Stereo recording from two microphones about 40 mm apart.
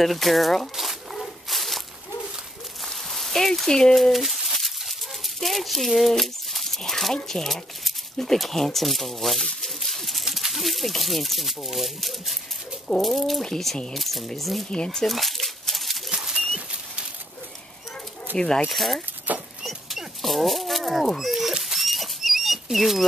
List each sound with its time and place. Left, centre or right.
0.0 s speech: centre
1.1 s a sound: centre
2.8 s rain on surface: centre
3.9 s a sound: centre
6.8 s speech: centre
12.8 s bird: centre
13.9 s speech: centre
14.7 s speech: centre
15.0 s a sound: centre
18.3 s speech: centre
18.7 s speech: centre
19.3 s dog: right
19.6 s livestock: centre
21.2 s dog: centre